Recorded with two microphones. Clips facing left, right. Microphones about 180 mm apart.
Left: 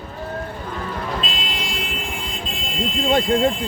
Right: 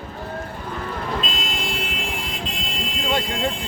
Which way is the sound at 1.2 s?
45° right (ahead or behind).